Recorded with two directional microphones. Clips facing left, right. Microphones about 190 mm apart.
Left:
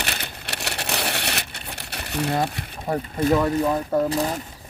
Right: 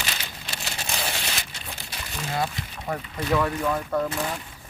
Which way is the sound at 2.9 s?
40° left (ahead or behind).